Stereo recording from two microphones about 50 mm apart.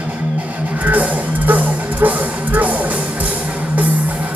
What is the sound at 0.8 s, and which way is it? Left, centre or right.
Music, right.